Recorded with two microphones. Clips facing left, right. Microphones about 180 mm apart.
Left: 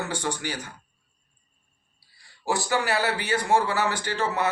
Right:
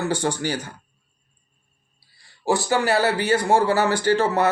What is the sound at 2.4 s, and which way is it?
Speech, 30° right (ahead or behind).